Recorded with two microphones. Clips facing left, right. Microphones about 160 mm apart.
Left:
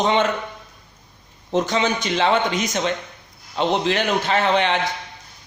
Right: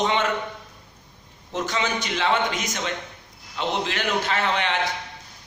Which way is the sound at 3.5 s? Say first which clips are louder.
Left 6 dB; 25° left (ahead or behind).